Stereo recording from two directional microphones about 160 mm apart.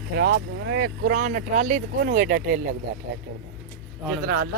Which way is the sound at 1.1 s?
50° right (ahead or behind).